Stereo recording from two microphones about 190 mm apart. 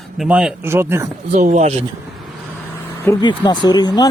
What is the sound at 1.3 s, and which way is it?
Speech, 40° right (ahead or behind).